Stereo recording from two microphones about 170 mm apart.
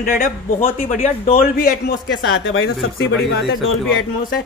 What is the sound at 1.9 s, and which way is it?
Speech, 70° left (ahead or behind).